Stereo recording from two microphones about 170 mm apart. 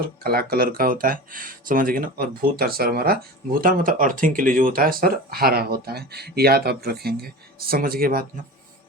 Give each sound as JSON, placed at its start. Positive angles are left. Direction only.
{"t": 0.0, "sound": "speech", "side_deg": -60}